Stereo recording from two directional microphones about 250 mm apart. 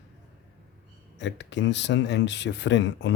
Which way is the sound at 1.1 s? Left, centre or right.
Left.